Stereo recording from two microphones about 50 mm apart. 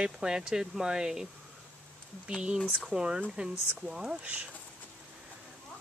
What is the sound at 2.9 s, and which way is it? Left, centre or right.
Speech, centre.